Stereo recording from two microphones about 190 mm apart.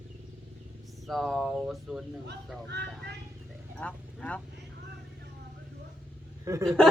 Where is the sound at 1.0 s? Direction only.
Centre (ahead or behind).